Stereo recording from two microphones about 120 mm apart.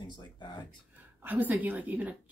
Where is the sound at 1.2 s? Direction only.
15° right (ahead or behind).